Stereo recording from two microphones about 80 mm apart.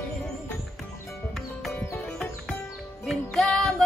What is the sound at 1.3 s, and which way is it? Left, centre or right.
Music, centre.